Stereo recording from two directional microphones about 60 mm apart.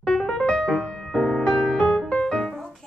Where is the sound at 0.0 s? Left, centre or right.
Centre.